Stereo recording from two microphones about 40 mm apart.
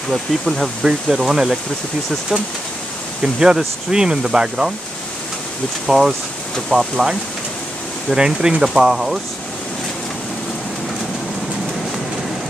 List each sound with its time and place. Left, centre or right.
0.1 s speech: centre
3.2 s speech: centre
5.9 s speech: centre